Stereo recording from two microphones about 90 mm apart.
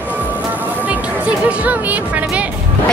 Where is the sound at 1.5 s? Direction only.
15° right (ahead or behind).